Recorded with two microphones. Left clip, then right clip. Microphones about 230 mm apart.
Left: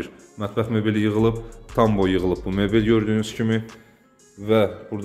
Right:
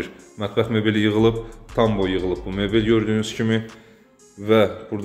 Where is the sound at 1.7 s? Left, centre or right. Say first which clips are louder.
Left 1 dB; centre.